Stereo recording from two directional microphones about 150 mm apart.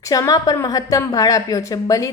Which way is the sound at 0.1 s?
25° left (ahead or behind).